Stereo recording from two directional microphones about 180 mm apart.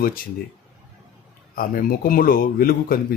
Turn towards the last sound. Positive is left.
turn(degrees=55)  # may be behind; listen again after turning